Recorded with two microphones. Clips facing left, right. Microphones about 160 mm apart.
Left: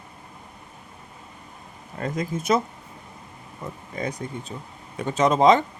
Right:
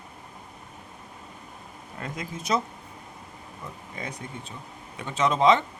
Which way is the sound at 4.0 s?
40° left (ahead or behind).